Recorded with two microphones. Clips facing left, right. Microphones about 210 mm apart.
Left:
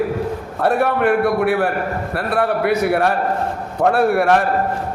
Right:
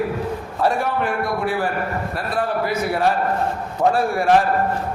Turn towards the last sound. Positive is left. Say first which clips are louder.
# left 2 dB
turn(degrees=60)  # may be behind; listen again after turning